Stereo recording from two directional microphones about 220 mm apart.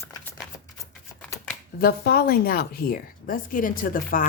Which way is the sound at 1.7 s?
45° left (ahead or behind).